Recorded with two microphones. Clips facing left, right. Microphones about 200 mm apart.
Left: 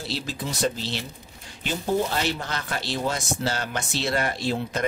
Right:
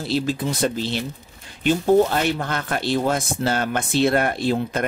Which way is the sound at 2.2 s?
55° right (ahead or behind).